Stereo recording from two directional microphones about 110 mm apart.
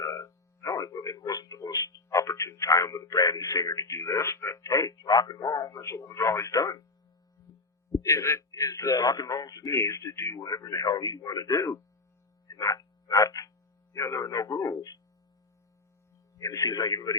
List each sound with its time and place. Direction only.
0.0 s speech: 30° left (ahead or behind)
8.0 s a man's voice: 25° left (ahead or behind)
12.5 s a sound: 30° left (ahead or behind)
13.9 s a man's voice: 25° left (ahead or behind)
16.4 s a man's voice: 30° left (ahead or behind)